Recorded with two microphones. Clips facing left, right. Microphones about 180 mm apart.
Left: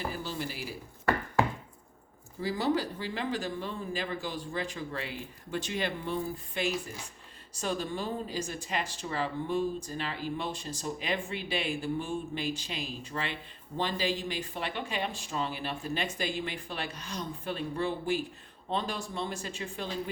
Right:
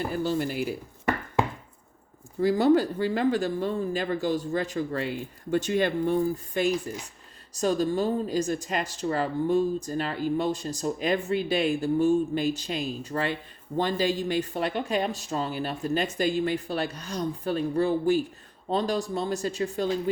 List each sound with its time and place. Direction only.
0.1 s speech: 50° right (ahead or behind)
2.4 s speech: 50° right (ahead or behind)